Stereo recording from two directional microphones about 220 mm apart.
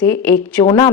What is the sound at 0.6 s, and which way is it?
Speech, 20° left (ahead or behind).